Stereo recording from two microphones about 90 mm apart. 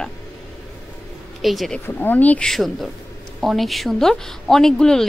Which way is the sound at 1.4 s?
Centre (ahead or behind).